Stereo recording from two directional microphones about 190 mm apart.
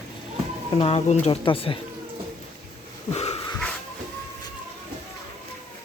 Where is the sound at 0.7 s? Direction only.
30° left (ahead or behind).